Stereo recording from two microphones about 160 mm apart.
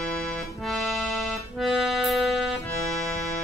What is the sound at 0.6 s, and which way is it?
Accordion, centre (ahead or behind).